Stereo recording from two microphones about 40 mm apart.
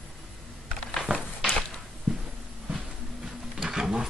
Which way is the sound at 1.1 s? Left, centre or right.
Right.